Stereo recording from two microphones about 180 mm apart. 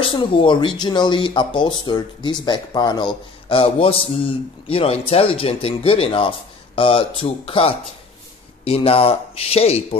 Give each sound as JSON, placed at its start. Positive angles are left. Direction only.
{"t": 0.0, "sound": "a man's voice", "side_deg": 30}